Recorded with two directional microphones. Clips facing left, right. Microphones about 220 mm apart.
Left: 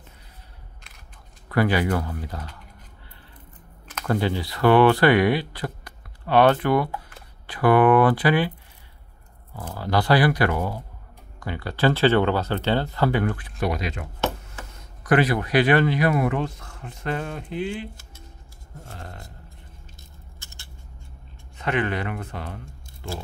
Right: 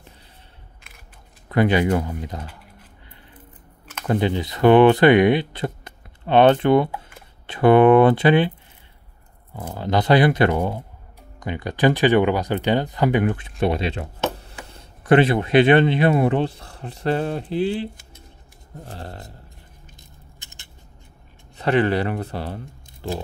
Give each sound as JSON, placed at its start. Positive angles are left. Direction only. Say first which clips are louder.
{"t": 1.5, "sound": "speech", "louder": "right 3 dB", "side_deg": -20}
{"t": 4.0, "sound": "speech", "louder": "right 3 dB", "side_deg": -20}
{"t": 9.6, "sound": "speech", "louder": "right 2 dB", "side_deg": -20}
{"t": 20.3, "sound": "scissors", "louder": "even", "side_deg": -20}
{"t": 21.5, "sound": "speech", "louder": "right 6 dB", "side_deg": -35}